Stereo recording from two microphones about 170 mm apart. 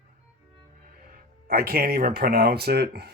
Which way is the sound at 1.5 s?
60° right (ahead or behind).